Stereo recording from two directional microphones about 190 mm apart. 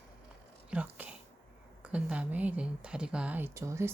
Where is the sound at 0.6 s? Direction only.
5° right (ahead or behind).